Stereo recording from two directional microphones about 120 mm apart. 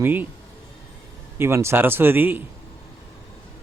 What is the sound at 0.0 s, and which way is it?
Speech, 15° right (ahead or behind).